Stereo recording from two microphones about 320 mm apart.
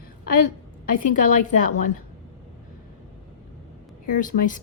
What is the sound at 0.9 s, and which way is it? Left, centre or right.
Speech, left.